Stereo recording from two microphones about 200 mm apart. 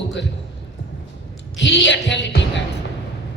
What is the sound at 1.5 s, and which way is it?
Speech, 65° left (ahead or behind).